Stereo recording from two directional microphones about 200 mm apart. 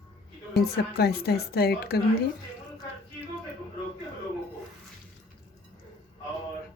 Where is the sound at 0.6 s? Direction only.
50° left (ahead or behind).